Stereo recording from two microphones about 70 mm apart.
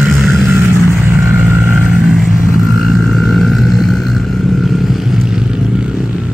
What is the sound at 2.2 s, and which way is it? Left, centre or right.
Vehicle, left.